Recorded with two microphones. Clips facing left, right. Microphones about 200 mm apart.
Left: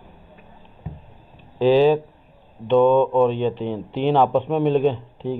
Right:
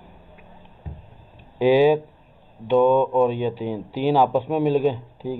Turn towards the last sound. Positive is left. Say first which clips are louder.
# left 2 dB
turn(degrees=0)  # may be behind; listen again after turning